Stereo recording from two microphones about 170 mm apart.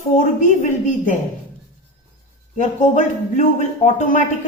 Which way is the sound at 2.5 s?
45° left (ahead or behind).